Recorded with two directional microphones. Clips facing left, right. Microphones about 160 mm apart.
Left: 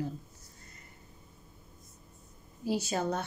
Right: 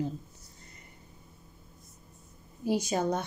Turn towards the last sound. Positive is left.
turn(degrees=-15)  # may be behind; listen again after turning